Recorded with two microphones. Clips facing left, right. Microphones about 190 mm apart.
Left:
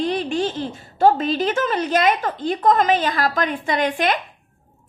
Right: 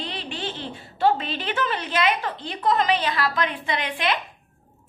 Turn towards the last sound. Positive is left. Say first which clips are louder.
# left 6 dB
turn(degrees=45)  # may be behind; listen again after turning